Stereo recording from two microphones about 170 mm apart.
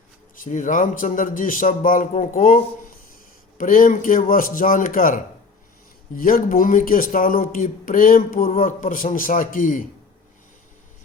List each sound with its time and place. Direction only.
0.3 s speech: 50° left (ahead or behind)
3.6 s speech: 55° left (ahead or behind)